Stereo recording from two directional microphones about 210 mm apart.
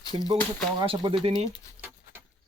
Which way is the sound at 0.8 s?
25° right (ahead or behind).